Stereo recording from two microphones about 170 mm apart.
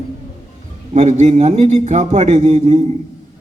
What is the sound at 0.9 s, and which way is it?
A man's voice, 45° right (ahead or behind).